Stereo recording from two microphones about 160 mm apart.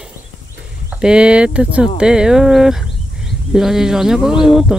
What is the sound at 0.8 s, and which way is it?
Speech, 5° right (ahead or behind).